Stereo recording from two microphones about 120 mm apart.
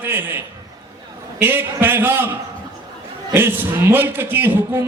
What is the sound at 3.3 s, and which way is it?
A man's voice, 20° right (ahead or behind).